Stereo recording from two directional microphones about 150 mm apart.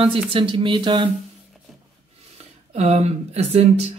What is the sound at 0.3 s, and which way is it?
Speech, 35° right (ahead or behind).